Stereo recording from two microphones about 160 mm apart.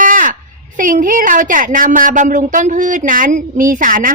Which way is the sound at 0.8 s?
55° right (ahead or behind).